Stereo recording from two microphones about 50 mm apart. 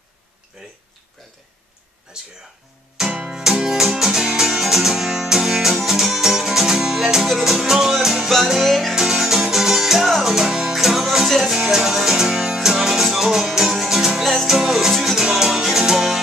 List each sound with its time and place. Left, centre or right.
2.1 s music: centre